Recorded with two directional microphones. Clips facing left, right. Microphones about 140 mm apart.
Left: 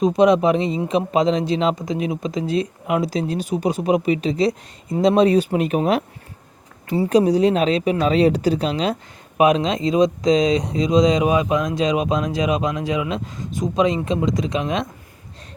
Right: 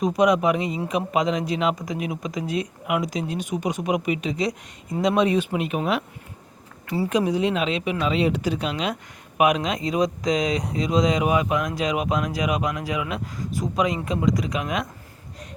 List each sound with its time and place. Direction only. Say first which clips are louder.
0.0 s speech: left 4 dB; 25° left (ahead or behind)
6.8 s speech: left 4 dB; 25° left (ahead or behind)
7.1 s speech: left 7 dB; 35° left (ahead or behind)